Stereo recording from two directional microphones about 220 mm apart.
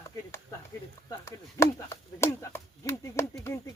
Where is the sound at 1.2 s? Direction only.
15° left (ahead or behind).